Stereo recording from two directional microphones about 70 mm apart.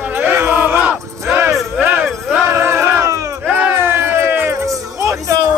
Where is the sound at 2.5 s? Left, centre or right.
Right.